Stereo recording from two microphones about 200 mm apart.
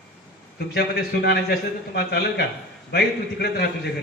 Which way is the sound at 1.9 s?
50° left (ahead or behind).